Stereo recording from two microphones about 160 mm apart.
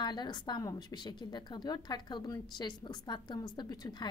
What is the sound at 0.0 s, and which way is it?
A woman's voice, 25° left (ahead or behind).